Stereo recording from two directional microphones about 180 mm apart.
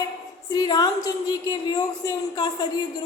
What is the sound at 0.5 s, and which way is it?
Speech, 20° left (ahead or behind).